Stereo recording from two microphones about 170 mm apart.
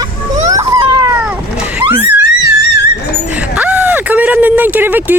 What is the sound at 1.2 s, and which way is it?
Vehicle, 5° right (ahead or behind).